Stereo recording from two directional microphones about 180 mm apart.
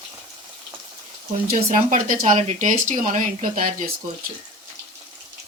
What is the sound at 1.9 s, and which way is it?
Speech, 50° right (ahead or behind).